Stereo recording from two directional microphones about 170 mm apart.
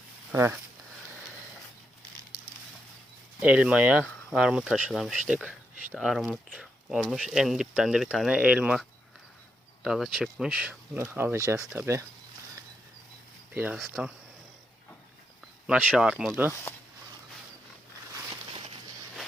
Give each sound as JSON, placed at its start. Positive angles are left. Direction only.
{"t": 0.3, "sound": "speech", "side_deg": -10}
{"t": 3.4, "sound": "speech", "side_deg": -5}
{"t": 13.5, "sound": "speech", "side_deg": -10}
{"t": 13.7, "sound": "speech", "side_deg": 0}
{"t": 15.6, "sound": "speech", "side_deg": -5}
{"t": 18.1, "sound": "a sound", "side_deg": -30}